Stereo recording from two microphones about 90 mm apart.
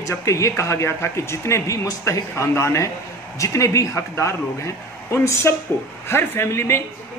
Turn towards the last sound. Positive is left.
turn(degrees=30)  # may be behind; listen again after turning